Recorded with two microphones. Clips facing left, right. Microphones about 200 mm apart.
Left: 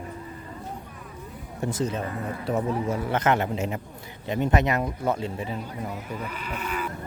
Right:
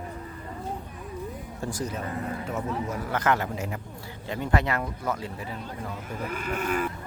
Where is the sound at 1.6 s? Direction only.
25° left (ahead or behind).